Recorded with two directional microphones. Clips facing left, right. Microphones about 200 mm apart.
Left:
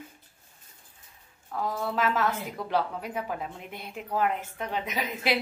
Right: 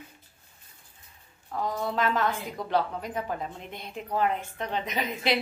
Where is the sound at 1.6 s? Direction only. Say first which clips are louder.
Even; 5° left (ahead or behind).